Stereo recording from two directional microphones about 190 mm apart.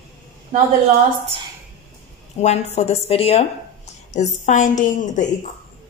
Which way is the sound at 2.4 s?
35° left (ahead or behind).